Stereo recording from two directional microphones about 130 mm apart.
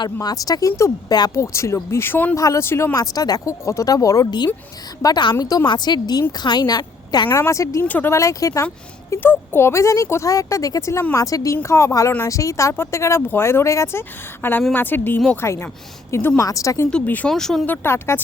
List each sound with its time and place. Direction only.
0.0 s a woman's voice: 30° left (ahead or behind)
16.9 s speech: 10° left (ahead or behind)
17.8 s speech: 20° left (ahead or behind)